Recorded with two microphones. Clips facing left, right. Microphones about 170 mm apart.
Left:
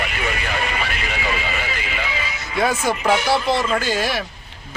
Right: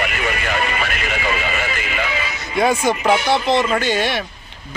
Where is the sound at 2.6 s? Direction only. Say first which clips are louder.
Right 3 dB; 5° left (ahead or behind).